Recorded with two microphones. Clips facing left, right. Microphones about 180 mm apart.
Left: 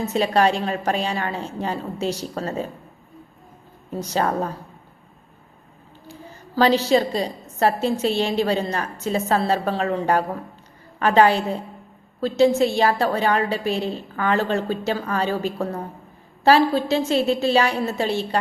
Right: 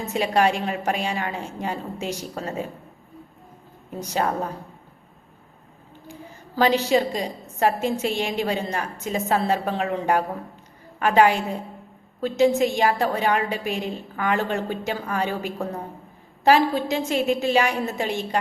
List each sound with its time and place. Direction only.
0.1 s speech: 15° right (ahead or behind)
4.0 s speech: 15° right (ahead or behind)
6.6 s speech: 15° right (ahead or behind)
12.5 s speech: 15° right (ahead or behind)